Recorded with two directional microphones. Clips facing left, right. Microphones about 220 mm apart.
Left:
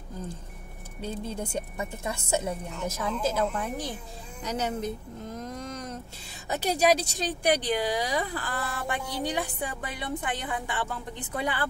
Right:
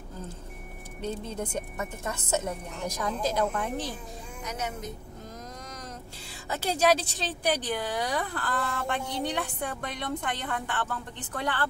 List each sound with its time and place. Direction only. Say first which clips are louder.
1.0 s speech: even; 10° left (ahead or behind)
4.4 s speech: left 6 dB; 35° left (ahead or behind)
5.4 s vehicle: left 6 dB; 25° left (ahead or behind)
6.5 s speech: left 1 dB; 15° left (ahead or behind)